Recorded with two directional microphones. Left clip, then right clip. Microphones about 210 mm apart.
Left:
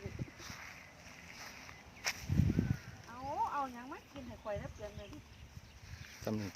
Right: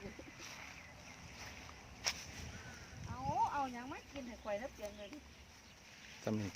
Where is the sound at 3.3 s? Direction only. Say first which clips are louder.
Even; 55° right (ahead or behind).